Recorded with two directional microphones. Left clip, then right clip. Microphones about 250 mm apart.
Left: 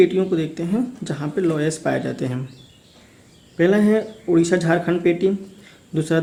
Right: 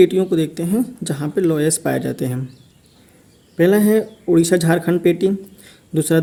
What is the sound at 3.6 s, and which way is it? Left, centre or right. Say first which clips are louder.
Speech: right 3 dB; right.